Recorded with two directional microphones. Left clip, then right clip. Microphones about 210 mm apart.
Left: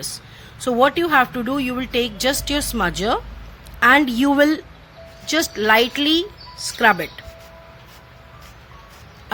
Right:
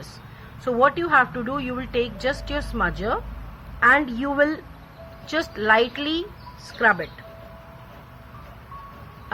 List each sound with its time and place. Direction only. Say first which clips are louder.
0.6 s speech: left 3 dB; 45° left (ahead or behind)